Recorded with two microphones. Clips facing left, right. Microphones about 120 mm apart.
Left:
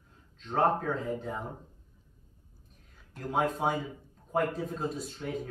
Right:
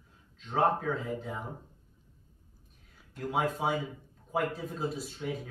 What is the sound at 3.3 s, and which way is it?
Speech, 5° right (ahead or behind).